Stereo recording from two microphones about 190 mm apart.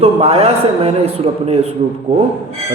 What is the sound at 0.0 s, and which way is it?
A man's voice, 30° right (ahead or behind).